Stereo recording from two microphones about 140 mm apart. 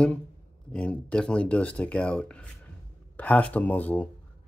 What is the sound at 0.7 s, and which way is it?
Speech, 10° left (ahead or behind).